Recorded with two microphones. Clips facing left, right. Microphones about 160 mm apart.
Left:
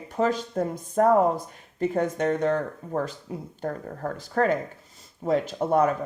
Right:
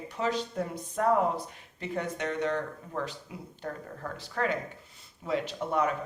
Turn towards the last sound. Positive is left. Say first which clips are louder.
# left 7 dB
turn(degrees=45)  # may be behind; listen again after turning